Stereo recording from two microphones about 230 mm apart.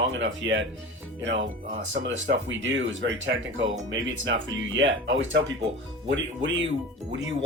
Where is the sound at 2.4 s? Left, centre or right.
Right.